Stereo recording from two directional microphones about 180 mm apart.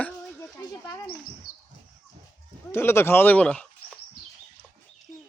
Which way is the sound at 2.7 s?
15° left (ahead or behind).